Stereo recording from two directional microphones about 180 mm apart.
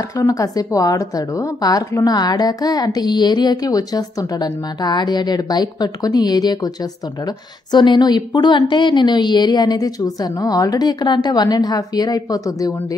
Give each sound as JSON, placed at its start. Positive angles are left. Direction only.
{"t": 0.2, "sound": "a woman's voice", "side_deg": 20}